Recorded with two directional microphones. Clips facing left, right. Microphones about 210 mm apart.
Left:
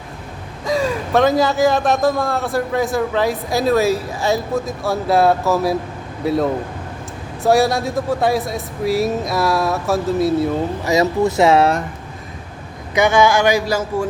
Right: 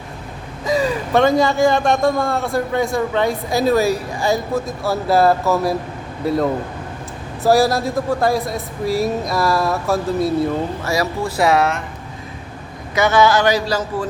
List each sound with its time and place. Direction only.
0.6 s a man's voice: centre (ahead or behind)
10.8 s speech: 20° left (ahead or behind)
12.9 s speech: 15° left (ahead or behind)